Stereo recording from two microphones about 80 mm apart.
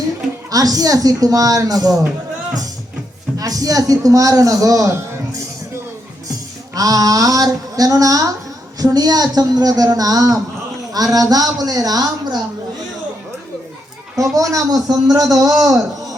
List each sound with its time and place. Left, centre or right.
0.5 s a man's voice: right
3.3 s a man's voice: right
6.7 s a man's voice: right
14.3 s a man's voice: right